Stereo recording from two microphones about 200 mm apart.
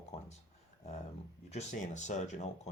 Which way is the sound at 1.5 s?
35° left (ahead or behind).